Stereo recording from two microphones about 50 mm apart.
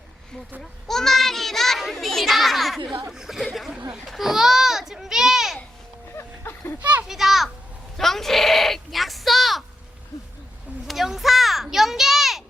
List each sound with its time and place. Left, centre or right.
0.6 s a child's voice: centre
6.7 s a child's voice: right
7.1 s a child's voice: centre
10.8 s a sound: centre